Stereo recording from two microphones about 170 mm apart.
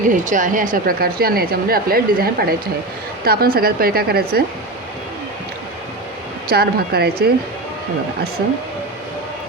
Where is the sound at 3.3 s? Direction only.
60° right (ahead or behind).